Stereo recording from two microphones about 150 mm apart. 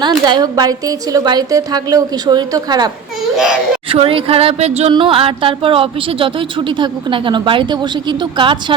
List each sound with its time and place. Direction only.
0.0 s a woman's voice: 30° right (ahead or behind)
3.3 s a child's voice: 5° right (ahead or behind)
3.8 s speech: 40° right (ahead or behind)